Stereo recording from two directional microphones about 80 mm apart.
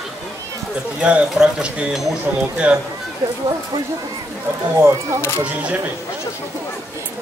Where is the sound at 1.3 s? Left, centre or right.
Centre.